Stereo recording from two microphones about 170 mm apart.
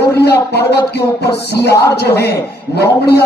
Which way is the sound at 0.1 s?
75° left (ahead or behind).